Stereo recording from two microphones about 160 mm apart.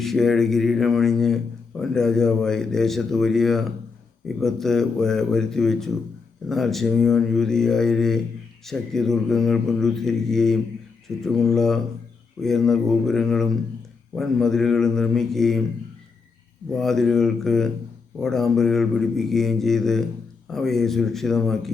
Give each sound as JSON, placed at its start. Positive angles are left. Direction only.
{"t": 0.0, "sound": "a man's voice", "side_deg": 0}
{"t": 16.7, "sound": "a man's voice", "side_deg": 0}